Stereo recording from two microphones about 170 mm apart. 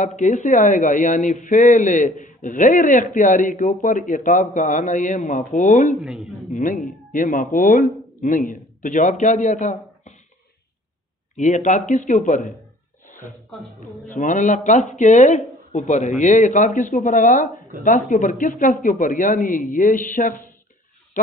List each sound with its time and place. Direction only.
0.0 s speech: 45° left (ahead or behind)
11.3 s speech: 45° left (ahead or behind)
13.7 s speech: 50° left (ahead or behind)